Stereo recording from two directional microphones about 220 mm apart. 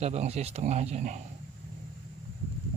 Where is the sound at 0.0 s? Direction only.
30° right (ahead or behind).